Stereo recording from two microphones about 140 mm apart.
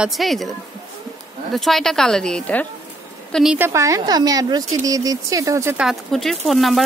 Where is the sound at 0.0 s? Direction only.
Centre (ahead or behind).